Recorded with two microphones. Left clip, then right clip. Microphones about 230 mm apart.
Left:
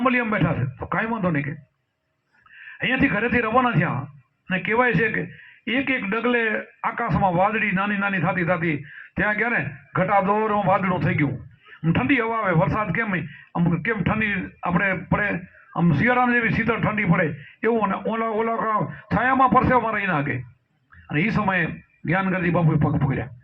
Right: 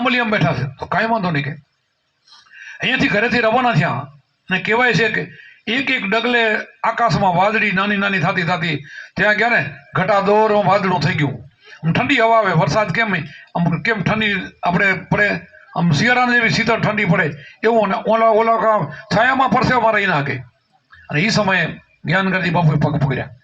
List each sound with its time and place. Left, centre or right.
0.0 s a man's voice: right
2.6 s a man's voice: right